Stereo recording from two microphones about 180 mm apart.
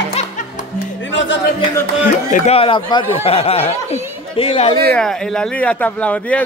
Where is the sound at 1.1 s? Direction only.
90° left.